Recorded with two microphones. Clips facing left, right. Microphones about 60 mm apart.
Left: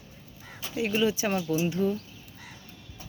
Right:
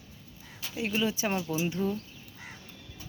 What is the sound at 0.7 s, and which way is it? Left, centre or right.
Speech, centre.